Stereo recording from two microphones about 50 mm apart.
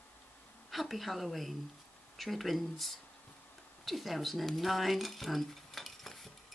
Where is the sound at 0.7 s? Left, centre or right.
Centre.